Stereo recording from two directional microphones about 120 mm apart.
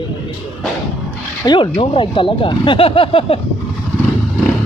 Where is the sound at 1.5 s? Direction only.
45° left (ahead or behind).